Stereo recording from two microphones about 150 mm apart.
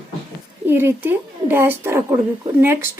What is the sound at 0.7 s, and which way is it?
A woman's voice, 15° right (ahead or behind).